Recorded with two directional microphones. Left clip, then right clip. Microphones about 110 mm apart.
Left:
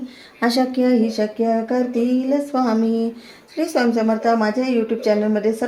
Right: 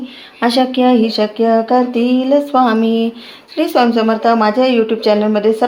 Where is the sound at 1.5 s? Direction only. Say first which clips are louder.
Right 8 dB; 25° right (ahead or behind).